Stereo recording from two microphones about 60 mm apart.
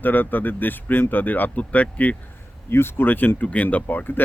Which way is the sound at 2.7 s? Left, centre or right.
Left.